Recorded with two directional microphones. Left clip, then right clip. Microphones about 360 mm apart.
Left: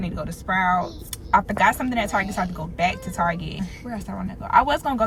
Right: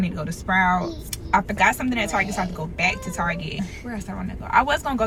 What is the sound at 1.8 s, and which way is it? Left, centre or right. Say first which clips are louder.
Speech: even; centre.